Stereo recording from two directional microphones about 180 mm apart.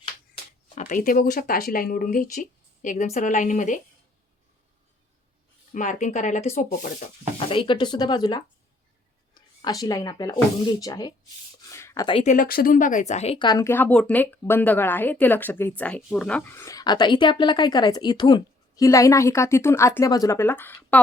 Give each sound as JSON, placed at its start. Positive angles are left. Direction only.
{"t": 0.8, "sound": "speech", "side_deg": 45}
{"t": 5.7, "sound": "speech", "side_deg": 45}
{"t": 7.5, "sound": "speech", "side_deg": 25}
{"t": 9.3, "sound": "a sound", "side_deg": 25}
{"t": 9.8, "sound": "speech", "side_deg": 20}
{"t": 11.7, "sound": "a sound", "side_deg": 15}
{"t": 12.2, "sound": "speech", "side_deg": 45}